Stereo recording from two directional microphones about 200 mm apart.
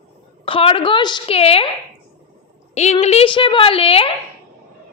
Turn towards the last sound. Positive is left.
turn(degrees=30)  # may be behind; listen again after turning